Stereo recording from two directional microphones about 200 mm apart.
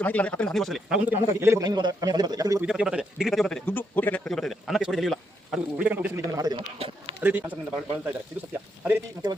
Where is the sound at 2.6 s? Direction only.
5° right (ahead or behind).